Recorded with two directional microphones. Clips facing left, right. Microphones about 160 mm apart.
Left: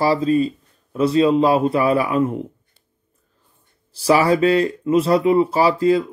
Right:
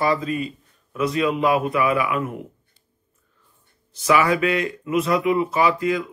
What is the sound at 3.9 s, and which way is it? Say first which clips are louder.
Speech: left 3 dB; 35° left (ahead or behind).